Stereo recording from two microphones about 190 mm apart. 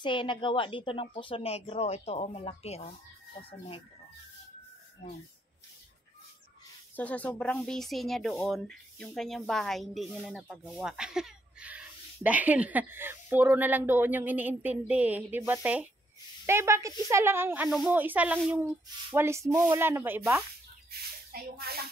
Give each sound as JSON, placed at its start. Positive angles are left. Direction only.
{"t": 0.0, "sound": "a woman's voice", "side_deg": 25}
{"t": 7.0, "sound": "speech", "side_deg": 10}
{"t": 20.9, "sound": "speech", "side_deg": -55}